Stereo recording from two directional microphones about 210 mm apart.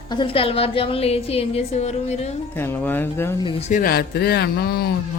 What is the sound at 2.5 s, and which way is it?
Speech, 10° left (ahead or behind).